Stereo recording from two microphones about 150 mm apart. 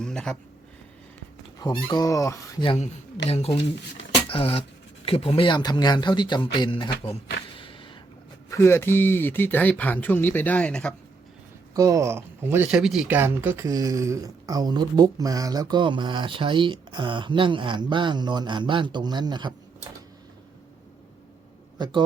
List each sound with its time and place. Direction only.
0.0 s speech: 5° left (ahead or behind)
1.5 s speech: 30° left (ahead or behind)
2.7 s speech: 45° left (ahead or behind)
7.5 s a sound: 35° left (ahead or behind)
8.4 s speech: 20° left (ahead or behind)
11.7 s speech: 25° right (ahead or behind)
12.6 s speech: 5° right (ahead or behind); by 19.5 s 30° right (ahead or behind)